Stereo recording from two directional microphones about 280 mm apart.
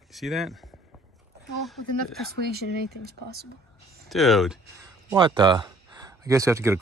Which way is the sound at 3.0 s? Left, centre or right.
Right.